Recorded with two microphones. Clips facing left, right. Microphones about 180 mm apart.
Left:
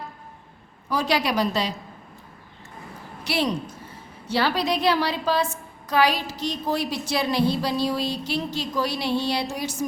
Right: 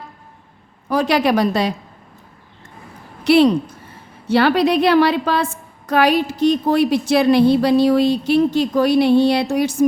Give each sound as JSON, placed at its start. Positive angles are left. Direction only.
{"t": 0.9, "sound": "a woman's voice", "side_deg": -55}
{"t": 3.2, "sound": "a woman's voice", "side_deg": -60}